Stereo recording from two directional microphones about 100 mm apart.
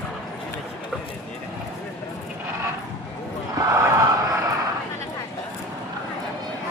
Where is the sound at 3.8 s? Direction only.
40° right (ahead or behind).